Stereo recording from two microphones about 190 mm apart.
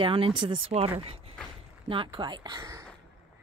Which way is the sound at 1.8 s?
25° right (ahead or behind).